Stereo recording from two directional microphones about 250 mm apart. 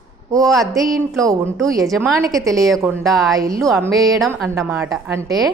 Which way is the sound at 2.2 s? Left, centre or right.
Centre.